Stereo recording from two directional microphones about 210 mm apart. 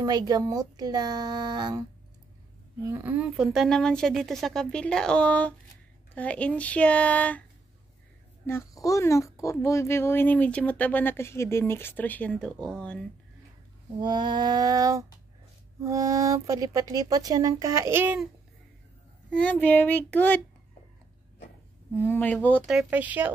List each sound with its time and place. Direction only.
0.0 s speech: 20° right (ahead or behind)
2.9 s a woman's voice: 10° right (ahead or behind)
8.5 s a child's voice: 15° left (ahead or behind)
13.9 s speech: 20° right (ahead or behind)
19.3 s a child's voice: 5° left (ahead or behind)
21.9 s a woman's voice: 10° left (ahead or behind); by 23.3 s 10° right (ahead or behind)